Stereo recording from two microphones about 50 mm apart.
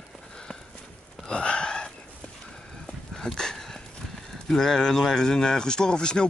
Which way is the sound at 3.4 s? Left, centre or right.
Centre.